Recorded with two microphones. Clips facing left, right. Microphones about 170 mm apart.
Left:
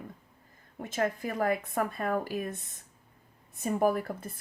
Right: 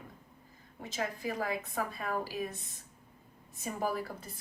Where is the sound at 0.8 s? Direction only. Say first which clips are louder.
Left 5 dB; 55° left (ahead or behind).